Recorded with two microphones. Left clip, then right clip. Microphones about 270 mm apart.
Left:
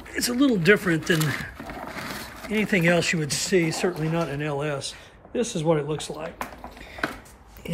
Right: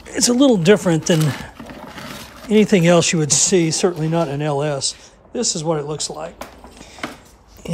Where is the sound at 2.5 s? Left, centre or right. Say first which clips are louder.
Right 8 dB; centre.